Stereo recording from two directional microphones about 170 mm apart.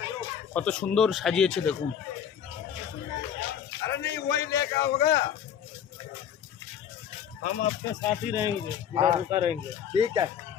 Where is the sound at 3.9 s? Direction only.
90° left.